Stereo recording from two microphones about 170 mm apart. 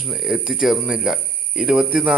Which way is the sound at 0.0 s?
Centre (ahead or behind).